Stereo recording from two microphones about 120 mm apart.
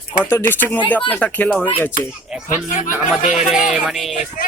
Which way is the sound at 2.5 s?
90° left.